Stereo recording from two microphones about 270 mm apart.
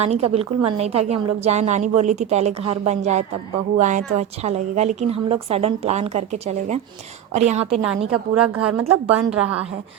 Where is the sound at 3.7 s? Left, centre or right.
Right.